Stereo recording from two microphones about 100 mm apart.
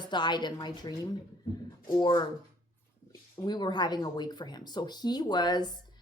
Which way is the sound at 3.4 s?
45° left (ahead or behind).